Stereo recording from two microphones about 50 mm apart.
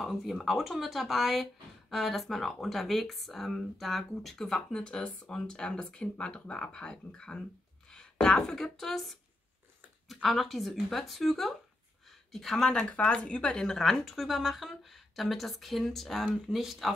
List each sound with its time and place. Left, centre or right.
0.0 s speech: centre
12.9 s speech: left; by 16.9 s centre